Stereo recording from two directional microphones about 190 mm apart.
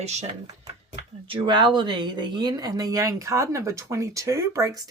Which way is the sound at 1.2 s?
25° right (ahead or behind).